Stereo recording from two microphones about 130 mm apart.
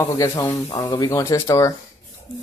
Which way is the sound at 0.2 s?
25° left (ahead or behind).